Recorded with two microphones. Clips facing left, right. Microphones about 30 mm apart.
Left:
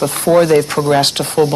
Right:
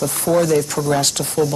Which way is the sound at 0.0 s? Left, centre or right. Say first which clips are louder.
Left 5 dB; left.